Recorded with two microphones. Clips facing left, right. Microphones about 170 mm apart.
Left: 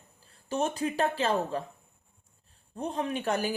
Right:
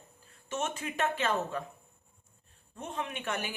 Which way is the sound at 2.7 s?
35° left (ahead or behind).